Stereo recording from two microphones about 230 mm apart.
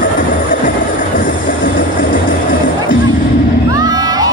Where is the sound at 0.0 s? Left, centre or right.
Left.